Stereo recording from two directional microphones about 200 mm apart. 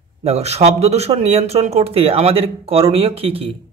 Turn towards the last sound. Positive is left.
turn(degrees=-30)  # may be behind; listen again after turning